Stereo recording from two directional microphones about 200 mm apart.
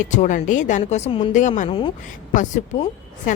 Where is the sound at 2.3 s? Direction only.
40° left (ahead or behind).